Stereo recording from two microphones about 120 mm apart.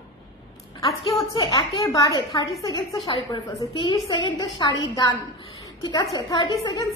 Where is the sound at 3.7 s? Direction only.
45° left (ahead or behind).